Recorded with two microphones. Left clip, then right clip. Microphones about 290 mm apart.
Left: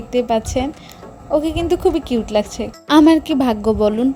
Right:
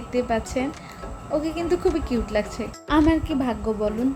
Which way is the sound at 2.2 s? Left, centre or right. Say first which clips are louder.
Left 7 dB; left.